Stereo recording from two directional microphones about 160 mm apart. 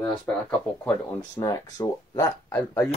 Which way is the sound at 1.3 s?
20° left (ahead or behind).